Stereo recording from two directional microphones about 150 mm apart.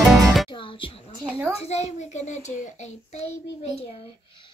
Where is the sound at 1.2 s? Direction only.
15° right (ahead or behind).